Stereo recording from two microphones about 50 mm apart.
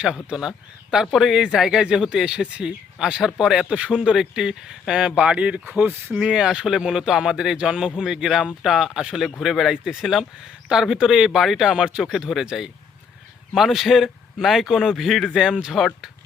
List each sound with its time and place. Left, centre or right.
0.3 s a man's voice: centre
3.2 s a man's voice: centre; by 5.5 s right
5.8 s speech: right
6.1 s a man's voice: centre
15.3 s a man's voice: centre